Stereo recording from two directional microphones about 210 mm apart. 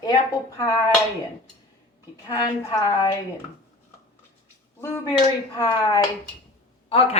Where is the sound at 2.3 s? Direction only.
20° left (ahead or behind).